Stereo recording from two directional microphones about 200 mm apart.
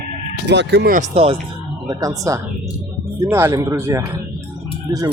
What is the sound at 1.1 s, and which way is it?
Speech, 30° right (ahead or behind).